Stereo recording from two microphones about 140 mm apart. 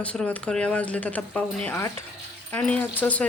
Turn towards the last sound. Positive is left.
turn(degrees=10)  # may be behind; listen again after turning